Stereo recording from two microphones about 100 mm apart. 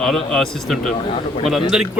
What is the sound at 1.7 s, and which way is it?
Speech, 5° right (ahead or behind).